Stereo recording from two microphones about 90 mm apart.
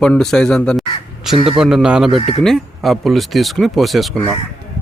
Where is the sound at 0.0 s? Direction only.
5° left (ahead or behind).